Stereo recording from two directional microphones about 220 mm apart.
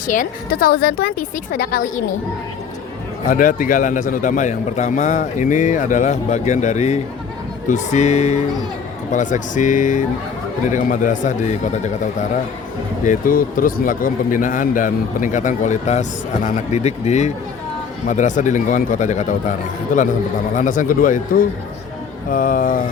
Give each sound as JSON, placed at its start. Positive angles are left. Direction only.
{"t": 0.1, "sound": "a woman's voice", "side_deg": 40}
{"t": 3.2, "sound": "a man's voice", "side_deg": 40}
{"t": 13.1, "sound": "a man's voice", "side_deg": 40}